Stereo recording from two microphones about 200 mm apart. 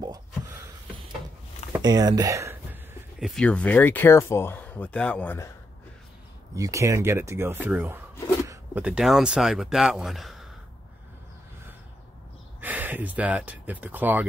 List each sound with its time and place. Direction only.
1.8 s speech: 20° right (ahead or behind)
3.2 s speech: centre (ahead or behind)
6.5 s speech: 15° right (ahead or behind)
12.5 s speech: 10° right (ahead or behind)